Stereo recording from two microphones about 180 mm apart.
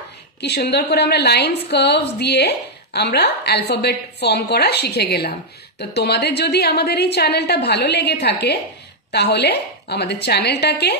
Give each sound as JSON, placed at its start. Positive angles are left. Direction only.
{"t": 0.4, "sound": "a woman's voice", "side_deg": 65}